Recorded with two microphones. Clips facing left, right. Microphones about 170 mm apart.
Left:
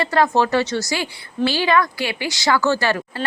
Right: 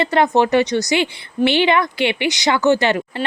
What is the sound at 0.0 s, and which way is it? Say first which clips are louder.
A woman's voice: right 2 dB; 20° right (ahead or behind).